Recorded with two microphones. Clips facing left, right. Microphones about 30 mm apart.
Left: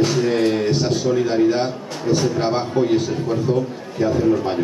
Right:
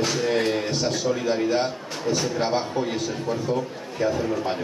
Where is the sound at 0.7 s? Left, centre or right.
Left.